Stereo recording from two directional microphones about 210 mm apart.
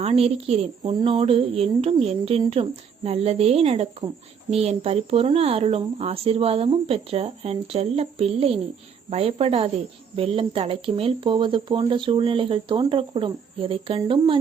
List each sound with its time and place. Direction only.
0.0 s speech: 30° right (ahead or behind)